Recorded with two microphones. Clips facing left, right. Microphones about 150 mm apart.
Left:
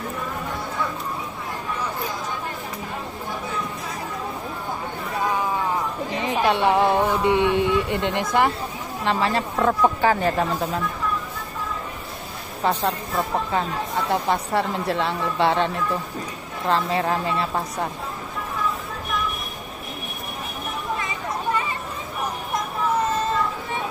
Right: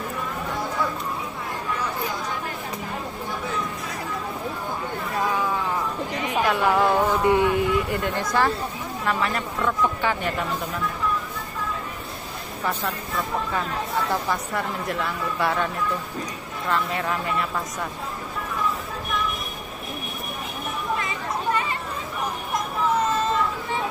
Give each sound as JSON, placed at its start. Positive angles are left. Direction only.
{"t": 6.1, "sound": "speech", "side_deg": 30}
{"t": 9.6, "sound": "speech", "side_deg": 45}
{"t": 12.6, "sound": "speech", "side_deg": 25}
{"t": 14.1, "sound": "speech", "side_deg": 25}